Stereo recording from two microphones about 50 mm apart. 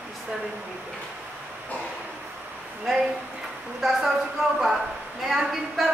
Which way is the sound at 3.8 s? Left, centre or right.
Centre.